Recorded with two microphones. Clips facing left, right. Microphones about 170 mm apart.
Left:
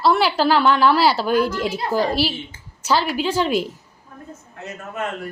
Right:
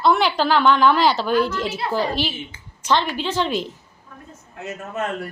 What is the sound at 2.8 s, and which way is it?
Speech, 10° left (ahead or behind).